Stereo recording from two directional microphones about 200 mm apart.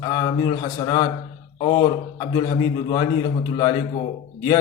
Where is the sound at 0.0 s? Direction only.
20° left (ahead or behind).